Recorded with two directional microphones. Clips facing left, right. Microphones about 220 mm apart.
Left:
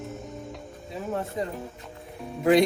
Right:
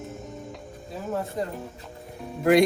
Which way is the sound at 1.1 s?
Centre (ahead or behind).